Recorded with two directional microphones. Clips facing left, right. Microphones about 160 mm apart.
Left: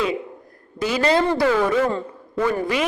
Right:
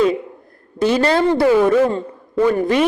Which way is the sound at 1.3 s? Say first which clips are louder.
Right 5 dB; 15° right (ahead or behind).